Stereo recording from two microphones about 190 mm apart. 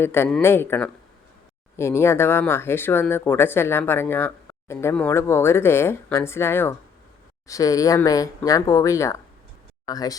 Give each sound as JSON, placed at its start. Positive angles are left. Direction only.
{"t": 0.0, "sound": "speech", "side_deg": 10}